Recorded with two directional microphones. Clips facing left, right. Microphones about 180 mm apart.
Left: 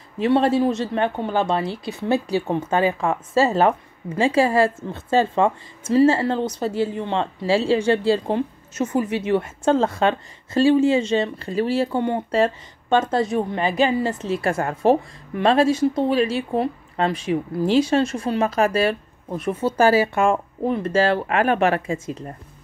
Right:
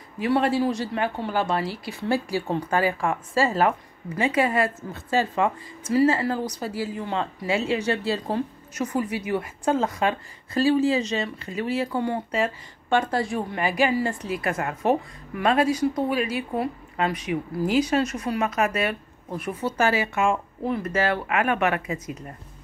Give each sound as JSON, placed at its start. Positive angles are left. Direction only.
{"t": 0.2, "sound": "speech", "side_deg": 25}